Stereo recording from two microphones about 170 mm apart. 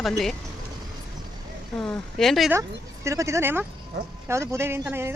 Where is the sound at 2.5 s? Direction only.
15° right (ahead or behind).